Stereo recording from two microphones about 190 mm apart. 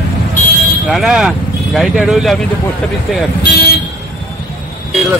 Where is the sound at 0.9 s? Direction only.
Centre (ahead or behind).